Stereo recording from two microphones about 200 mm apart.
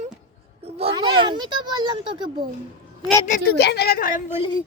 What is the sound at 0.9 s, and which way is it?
A child's voice, 25° right (ahead or behind).